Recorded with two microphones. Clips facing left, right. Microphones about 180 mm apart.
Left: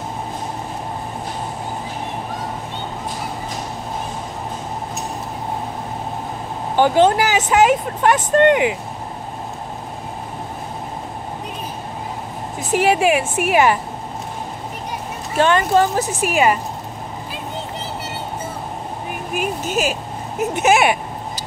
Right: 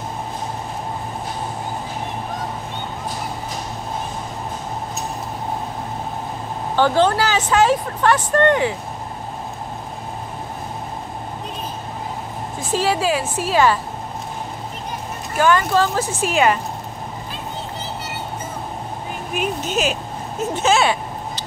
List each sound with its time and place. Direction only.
6.8 s speech: 20° left (ahead or behind)
12.7 s speech: 20° left (ahead or behind)
15.3 s speech: 25° left (ahead or behind); by 16.5 s 10° left (ahead or behind)
19.3 s speech: 5° left (ahead or behind)
20.5 s speech: 20° left (ahead or behind)